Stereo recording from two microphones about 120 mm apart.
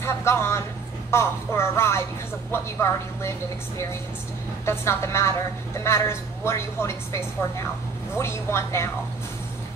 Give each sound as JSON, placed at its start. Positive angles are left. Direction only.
{"t": 0.0, "sound": "a woman's voice", "side_deg": 20}